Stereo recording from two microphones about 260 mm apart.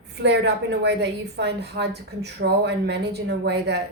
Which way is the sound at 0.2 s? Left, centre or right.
Right.